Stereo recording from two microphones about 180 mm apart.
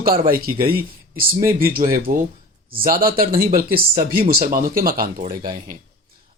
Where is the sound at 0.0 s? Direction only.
55° right (ahead or behind).